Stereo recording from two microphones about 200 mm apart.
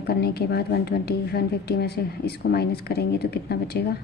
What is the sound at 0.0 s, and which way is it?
Speech, 50° left (ahead or behind).